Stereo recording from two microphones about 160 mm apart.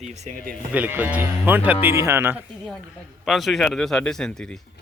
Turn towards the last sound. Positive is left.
turn(degrees=5)  # may be behind; listen again after turning